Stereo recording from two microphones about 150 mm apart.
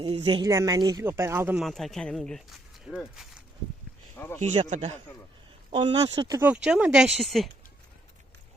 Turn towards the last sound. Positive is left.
turn(degrees=0)  # may be behind; listen again after turning